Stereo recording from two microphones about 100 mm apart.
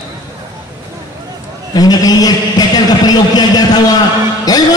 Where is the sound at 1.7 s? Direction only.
40° left (ahead or behind).